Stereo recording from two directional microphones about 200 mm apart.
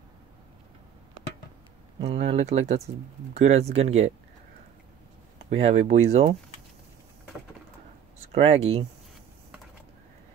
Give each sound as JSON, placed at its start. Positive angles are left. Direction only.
{"t": 2.0, "sound": "speech", "side_deg": -30}
{"t": 5.5, "sound": "speech", "side_deg": -30}
{"t": 8.3, "sound": "speech", "side_deg": -30}